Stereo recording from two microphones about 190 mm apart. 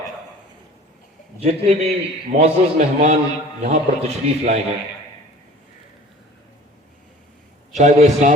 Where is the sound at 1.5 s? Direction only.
30° right (ahead or behind).